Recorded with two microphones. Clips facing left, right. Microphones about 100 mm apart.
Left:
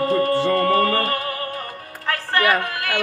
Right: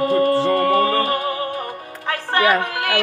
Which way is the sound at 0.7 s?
45° left (ahead or behind).